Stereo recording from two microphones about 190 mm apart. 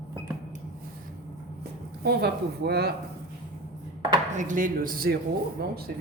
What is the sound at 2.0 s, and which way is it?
Speech, 55° right (ahead or behind).